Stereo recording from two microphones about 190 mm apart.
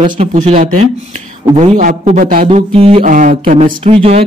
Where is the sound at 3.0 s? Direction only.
45° right (ahead or behind).